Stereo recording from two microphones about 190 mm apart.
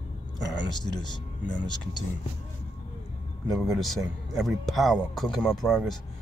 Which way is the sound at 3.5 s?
Centre (ahead or behind).